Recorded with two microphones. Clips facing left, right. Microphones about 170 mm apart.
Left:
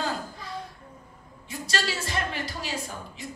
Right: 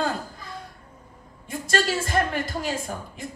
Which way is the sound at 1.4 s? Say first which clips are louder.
Right 6 dB; 50° right (ahead or behind).